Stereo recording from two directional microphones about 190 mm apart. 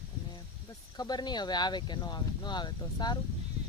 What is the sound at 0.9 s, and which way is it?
Speech, 20° left (ahead or behind).